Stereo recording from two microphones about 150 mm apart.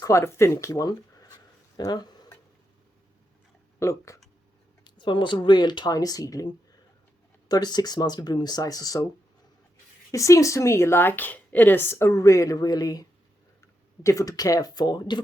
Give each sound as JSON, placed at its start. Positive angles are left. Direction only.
{"t": 0.0, "sound": "speech", "side_deg": 20}
{"t": 1.7, "sound": "a sound", "side_deg": 25}
{"t": 3.8, "sound": "a woman's voice", "side_deg": 20}
{"t": 4.8, "sound": "a woman's voice", "side_deg": 30}
{"t": 10.1, "sound": "a woman's voice", "side_deg": 20}